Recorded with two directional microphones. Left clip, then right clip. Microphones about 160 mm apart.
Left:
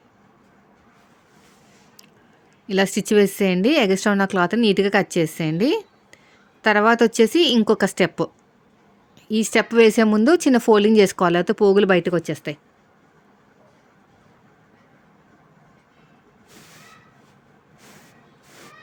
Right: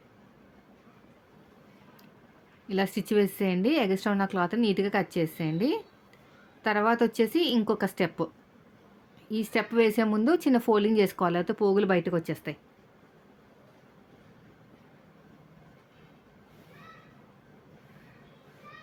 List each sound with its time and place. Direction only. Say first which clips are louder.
2.6 s speech: left 9 dB; 55° left (ahead or behind)
9.3 s speech: left 9 dB; 55° left (ahead or behind)